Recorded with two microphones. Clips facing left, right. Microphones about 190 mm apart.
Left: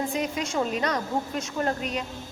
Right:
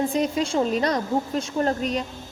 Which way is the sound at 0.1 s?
30° right (ahead or behind).